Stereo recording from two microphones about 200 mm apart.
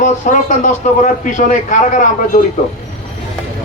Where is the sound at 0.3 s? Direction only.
40° left (ahead or behind).